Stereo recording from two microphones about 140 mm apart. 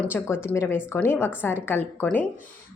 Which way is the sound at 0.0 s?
15° left (ahead or behind).